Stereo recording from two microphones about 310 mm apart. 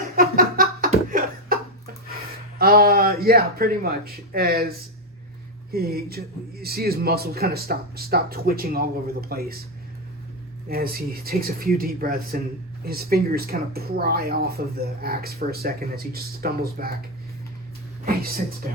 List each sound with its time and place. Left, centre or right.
0.2 s a sound: right
2.6 s speech: right
5.7 s speech: right
10.7 s speech: right
18.0 s speech: right